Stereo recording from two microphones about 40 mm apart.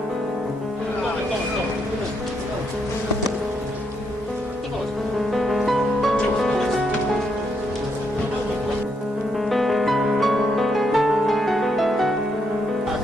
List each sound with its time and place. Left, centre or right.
5.3 s music: centre
9.5 s music: centre